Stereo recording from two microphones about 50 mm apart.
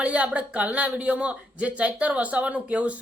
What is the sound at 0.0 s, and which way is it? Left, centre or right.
Speech, right.